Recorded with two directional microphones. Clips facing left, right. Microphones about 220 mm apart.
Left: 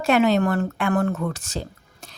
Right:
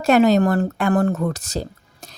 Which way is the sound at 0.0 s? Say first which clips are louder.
Right 4 dB; 40° right (ahead or behind).